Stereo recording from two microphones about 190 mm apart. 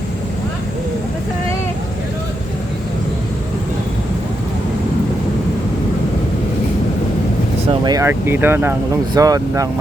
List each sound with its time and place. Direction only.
7.7 s speech: 20° right (ahead or behind)